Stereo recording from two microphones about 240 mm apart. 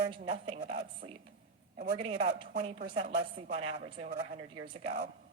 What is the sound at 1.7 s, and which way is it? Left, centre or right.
Speech, right.